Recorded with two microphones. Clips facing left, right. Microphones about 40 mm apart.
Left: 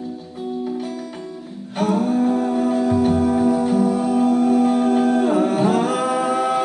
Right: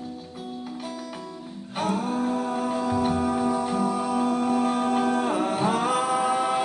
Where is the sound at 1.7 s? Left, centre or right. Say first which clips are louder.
Left 7 dB; centre.